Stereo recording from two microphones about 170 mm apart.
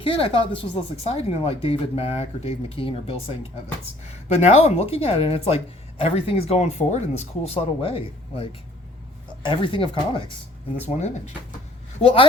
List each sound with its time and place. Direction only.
0.0 s speech: 30° left (ahead or behind)
10.8 s speech: 40° left (ahead or behind)